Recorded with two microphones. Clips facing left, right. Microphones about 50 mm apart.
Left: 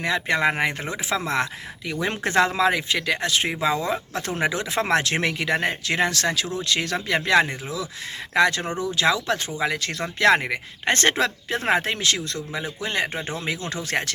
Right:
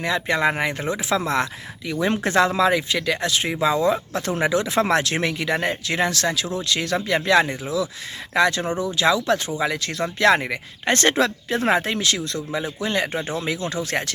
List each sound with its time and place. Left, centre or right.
0.0 s speech: left